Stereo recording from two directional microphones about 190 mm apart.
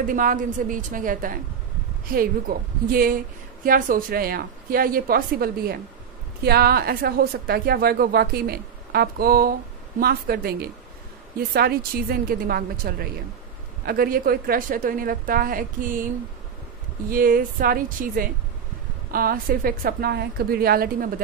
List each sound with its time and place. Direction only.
0.0 s a woman's voice: 45° right (ahead or behind)
17.1 s a woman's voice: 50° right (ahead or behind)